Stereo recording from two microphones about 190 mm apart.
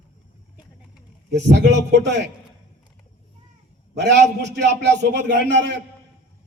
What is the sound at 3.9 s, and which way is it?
A man's voice, 65° right (ahead or behind).